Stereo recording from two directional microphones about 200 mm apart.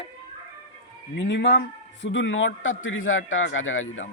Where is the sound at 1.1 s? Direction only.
60° left (ahead or behind); by 4.0 s 80° left.